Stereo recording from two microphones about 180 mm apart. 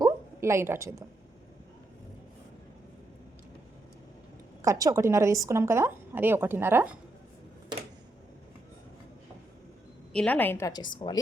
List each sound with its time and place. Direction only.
0.0 s a sound: 15° right (ahead or behind)
4.6 s a woman's voice: 20° right (ahead or behind)
10.1 s a woman's voice: 5° left (ahead or behind); by 11.2 s 25° left (ahead or behind)